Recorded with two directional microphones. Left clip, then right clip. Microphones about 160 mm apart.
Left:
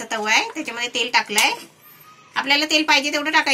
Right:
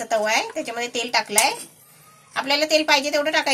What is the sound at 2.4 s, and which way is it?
Speech, 90° right.